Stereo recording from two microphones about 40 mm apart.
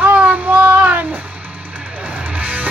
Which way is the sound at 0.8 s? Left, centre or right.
Right.